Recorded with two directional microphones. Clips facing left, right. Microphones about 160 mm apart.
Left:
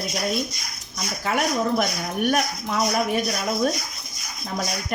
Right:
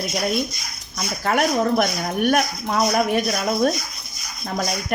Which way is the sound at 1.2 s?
65° right (ahead or behind).